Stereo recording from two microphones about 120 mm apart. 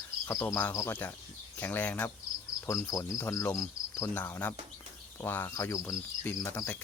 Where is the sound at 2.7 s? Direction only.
25° left (ahead or behind).